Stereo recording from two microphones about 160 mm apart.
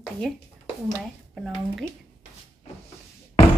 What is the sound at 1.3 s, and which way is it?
Speech, centre (ahead or behind).